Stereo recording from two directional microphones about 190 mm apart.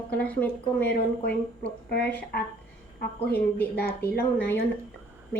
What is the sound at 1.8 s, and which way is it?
Speech, 55° left (ahead or behind).